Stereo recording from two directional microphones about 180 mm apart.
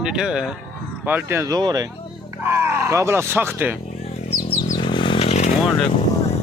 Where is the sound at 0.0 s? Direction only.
5° right (ahead or behind).